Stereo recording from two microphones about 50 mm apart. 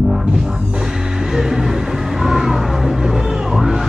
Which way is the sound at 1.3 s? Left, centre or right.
Centre.